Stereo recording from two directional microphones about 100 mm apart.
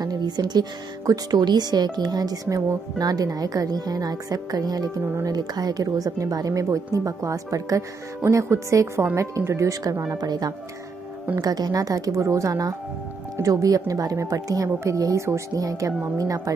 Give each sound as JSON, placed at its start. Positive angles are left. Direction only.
{"t": 0.0, "sound": "speech", "side_deg": -40}